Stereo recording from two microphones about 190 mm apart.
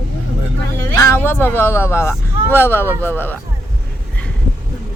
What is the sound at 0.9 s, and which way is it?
Speech, 15° left (ahead or behind).